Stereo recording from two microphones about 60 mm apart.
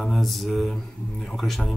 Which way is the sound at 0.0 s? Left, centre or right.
Centre.